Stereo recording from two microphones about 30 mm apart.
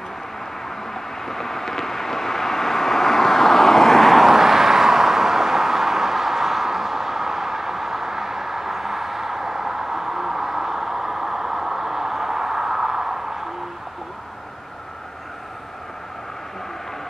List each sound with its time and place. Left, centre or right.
0.9 s vehicle: centre
4.3 s vehicle: centre